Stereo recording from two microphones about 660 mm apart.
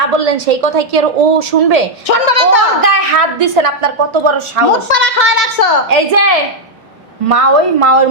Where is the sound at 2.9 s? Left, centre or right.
Right.